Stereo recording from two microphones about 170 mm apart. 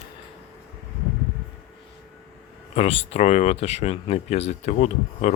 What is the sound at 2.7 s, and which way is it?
Speech, 35° left (ahead or behind).